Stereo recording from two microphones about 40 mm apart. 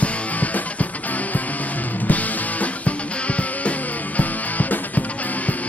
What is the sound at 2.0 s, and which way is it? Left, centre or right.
Music, left.